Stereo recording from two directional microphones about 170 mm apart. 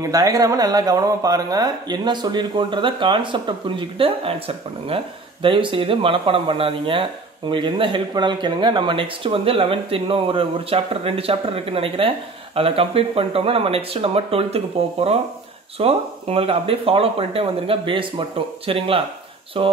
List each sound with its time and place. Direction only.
0.0 s speech: 20° right (ahead or behind)